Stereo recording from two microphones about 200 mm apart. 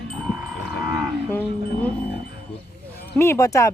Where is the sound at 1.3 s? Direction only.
10° left (ahead or behind).